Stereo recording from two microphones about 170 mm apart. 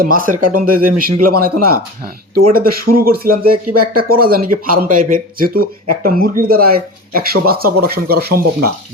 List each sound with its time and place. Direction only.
0.0 s speech: 55° right (ahead or behind)